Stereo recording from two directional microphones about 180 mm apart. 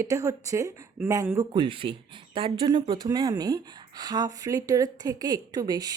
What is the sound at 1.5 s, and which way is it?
Speech, 25° right (ahead or behind).